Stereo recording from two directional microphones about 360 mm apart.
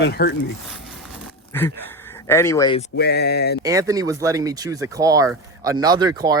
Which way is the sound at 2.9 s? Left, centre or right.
Left.